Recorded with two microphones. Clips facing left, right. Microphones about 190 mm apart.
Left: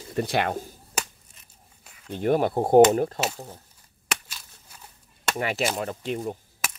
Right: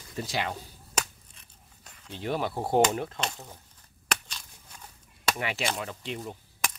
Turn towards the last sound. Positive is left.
turn(degrees=45)  # may be behind; listen again after turning